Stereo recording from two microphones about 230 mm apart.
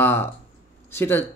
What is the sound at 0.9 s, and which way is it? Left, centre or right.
Speech, centre.